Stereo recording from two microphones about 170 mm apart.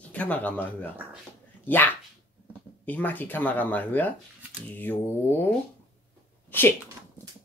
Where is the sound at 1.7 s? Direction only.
10° left (ahead or behind).